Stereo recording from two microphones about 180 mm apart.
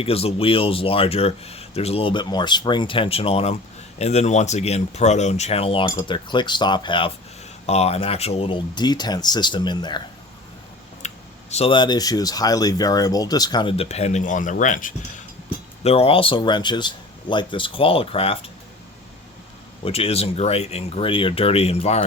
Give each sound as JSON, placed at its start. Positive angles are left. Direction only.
{"t": 0.0, "sound": "speech", "side_deg": 35}
{"t": 11.0, "sound": "a sound", "side_deg": 40}
{"t": 11.5, "sound": "speech", "side_deg": 30}
{"t": 15.8, "sound": "speech", "side_deg": 35}
{"t": 19.8, "sound": "speech", "side_deg": 35}